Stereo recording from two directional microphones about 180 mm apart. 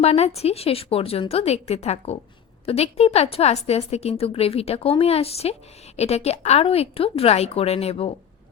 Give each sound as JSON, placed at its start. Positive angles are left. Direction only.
{"t": 0.0, "sound": "a woman's voice", "side_deg": 35}